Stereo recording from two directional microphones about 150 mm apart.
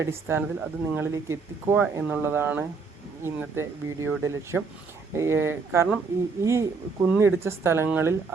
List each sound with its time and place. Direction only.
0.0 s speech: 15° right (ahead or behind)